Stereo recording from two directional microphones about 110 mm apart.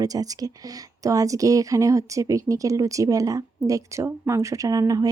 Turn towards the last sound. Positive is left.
turn(degrees=-35)  # may be behind; listen again after turning